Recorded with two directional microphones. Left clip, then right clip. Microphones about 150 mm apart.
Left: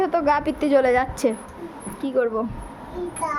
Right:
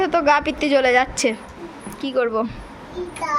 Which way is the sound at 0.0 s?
5° left (ahead or behind).